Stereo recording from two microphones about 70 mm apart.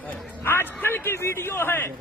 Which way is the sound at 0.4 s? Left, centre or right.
Left.